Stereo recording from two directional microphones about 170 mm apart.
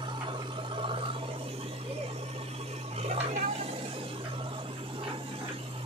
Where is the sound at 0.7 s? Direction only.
30° right (ahead or behind).